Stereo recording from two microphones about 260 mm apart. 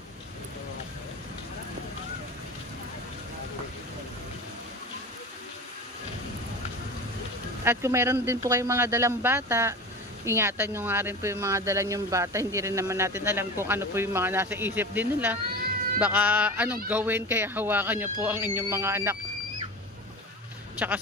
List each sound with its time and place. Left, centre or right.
7.6 s speech: centre
20.8 s speech: centre